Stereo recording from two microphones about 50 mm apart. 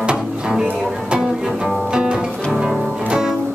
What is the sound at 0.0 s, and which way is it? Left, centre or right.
Music, centre.